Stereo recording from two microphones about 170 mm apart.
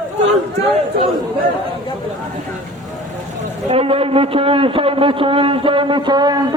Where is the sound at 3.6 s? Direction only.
35° right (ahead or behind).